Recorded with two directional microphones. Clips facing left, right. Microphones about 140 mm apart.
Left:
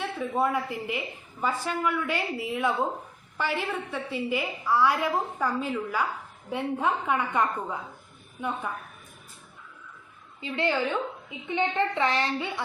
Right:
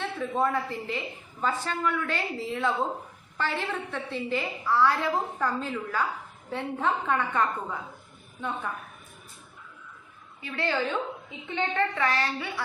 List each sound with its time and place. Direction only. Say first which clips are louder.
0.0 s a woman's voice: even; 10° left (ahead or behind)
10.4 s a woman's voice: left 2 dB; 20° left (ahead or behind)